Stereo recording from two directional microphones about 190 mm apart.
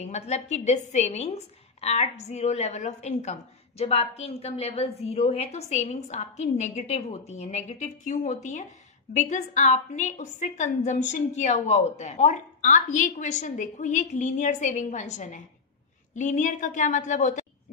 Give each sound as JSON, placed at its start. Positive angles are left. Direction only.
{"t": 0.0, "sound": "a woman's voice", "side_deg": 35}